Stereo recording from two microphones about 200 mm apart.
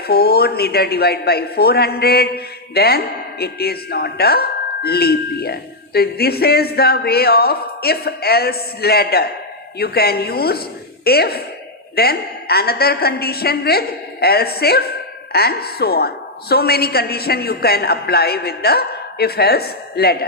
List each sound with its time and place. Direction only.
0.1 s a man's voice: 50° left (ahead or behind)